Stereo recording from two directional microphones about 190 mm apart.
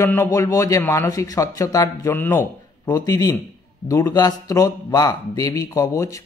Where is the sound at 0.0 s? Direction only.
15° left (ahead or behind).